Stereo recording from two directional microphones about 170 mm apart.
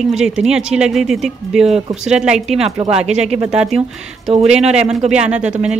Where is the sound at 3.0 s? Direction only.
40° right (ahead or behind).